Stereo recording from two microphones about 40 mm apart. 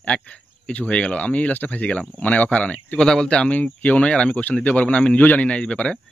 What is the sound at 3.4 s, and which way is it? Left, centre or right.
Speech, left.